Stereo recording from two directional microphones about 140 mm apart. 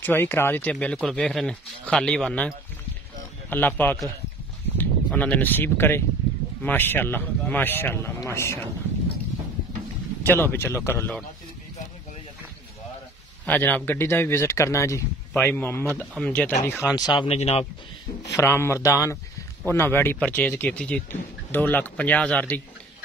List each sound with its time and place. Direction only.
0.0 s speech: 15° left (ahead or behind)
10.2 s speech: 15° left (ahead or behind)
13.5 s speech: 10° left (ahead or behind); by 17.4 s 35° left (ahead or behind)
17.4 s speech: 50° left (ahead or behind)
18.3 s speech: 20° left (ahead or behind)